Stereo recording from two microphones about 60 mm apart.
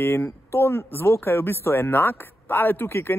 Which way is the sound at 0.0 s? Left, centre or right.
Left.